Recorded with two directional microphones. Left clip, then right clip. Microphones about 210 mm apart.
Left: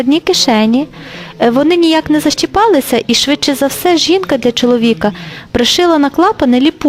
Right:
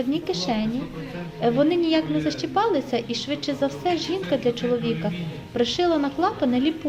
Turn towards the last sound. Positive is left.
turn(degrees=55)  # may be behind; listen again after turning